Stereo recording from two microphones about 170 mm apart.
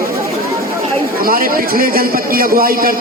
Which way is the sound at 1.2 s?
60° right (ahead or behind).